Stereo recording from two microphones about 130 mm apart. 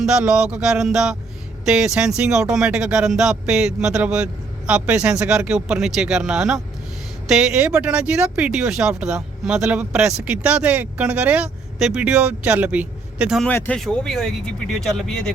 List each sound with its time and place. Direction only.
0.0 s speech: 5° right (ahead or behind)
13.5 s speech: 15° left (ahead or behind)
13.7 s speech: 5° left (ahead or behind)